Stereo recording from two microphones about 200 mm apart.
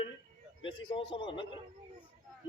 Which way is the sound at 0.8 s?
25° left (ahead or behind).